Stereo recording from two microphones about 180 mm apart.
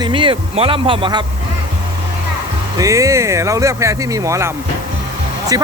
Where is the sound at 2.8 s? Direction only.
15° right (ahead or behind).